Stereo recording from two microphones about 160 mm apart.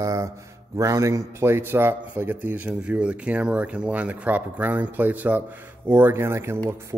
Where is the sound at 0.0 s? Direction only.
20° right (ahead or behind).